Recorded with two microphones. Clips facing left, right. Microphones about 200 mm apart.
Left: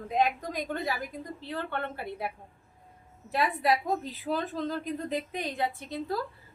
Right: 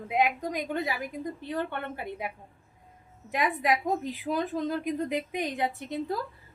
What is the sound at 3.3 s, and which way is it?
A woman's voice, 15° right (ahead or behind).